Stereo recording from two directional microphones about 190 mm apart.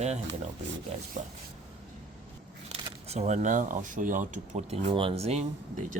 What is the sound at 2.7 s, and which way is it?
Speech, 35° right (ahead or behind).